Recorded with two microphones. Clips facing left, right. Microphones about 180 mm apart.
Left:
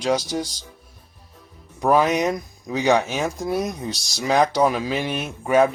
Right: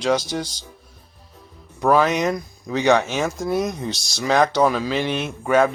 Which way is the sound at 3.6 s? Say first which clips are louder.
Right 2 dB; 35° left (ahead or behind).